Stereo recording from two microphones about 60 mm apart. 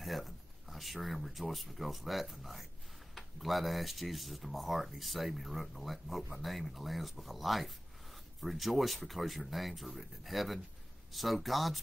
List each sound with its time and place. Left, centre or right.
0.0 s speech: centre